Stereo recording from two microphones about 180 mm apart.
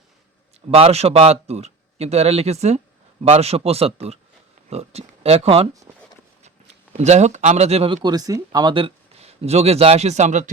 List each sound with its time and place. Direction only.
0.7 s a man's voice: 35° right (ahead or behind)